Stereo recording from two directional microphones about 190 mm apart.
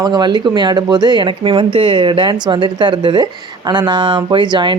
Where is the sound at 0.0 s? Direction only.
20° right (ahead or behind).